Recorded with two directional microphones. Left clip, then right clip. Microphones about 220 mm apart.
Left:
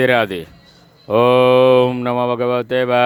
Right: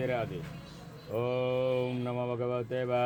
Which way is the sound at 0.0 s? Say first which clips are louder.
Left 18 dB; 45° left (ahead or behind).